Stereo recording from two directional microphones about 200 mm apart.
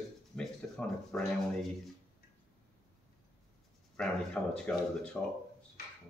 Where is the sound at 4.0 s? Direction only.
5° left (ahead or behind).